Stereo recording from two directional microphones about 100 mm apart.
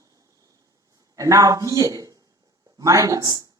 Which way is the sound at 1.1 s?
35° right (ahead or behind).